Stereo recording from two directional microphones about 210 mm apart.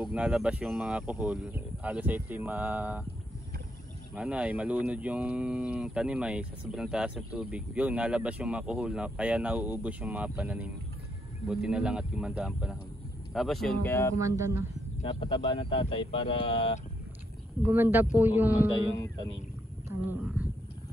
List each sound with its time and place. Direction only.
0.1 s speech: 5° right (ahead or behind)
4.1 s speech: 5° right (ahead or behind)
14.2 s speech: 15° right (ahead or behind)
15.0 s speech: 25° left (ahead or behind)
17.6 s speech: 10° right (ahead or behind)